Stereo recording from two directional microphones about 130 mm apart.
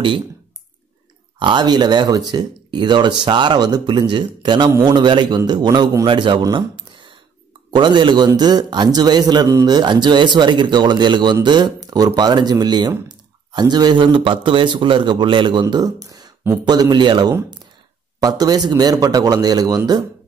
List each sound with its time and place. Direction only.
1.4 s speech: 35° right (ahead or behind)
15.7 s a man's voice: 30° right (ahead or behind)